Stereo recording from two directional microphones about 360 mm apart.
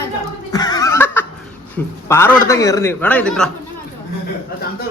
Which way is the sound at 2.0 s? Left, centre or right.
Centre.